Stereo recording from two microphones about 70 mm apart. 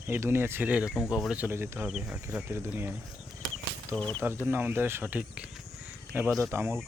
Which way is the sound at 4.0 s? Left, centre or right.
Centre.